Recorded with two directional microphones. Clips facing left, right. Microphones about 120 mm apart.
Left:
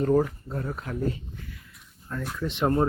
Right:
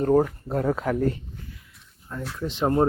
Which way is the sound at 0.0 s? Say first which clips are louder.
Right 2 dB; 40° right (ahead or behind).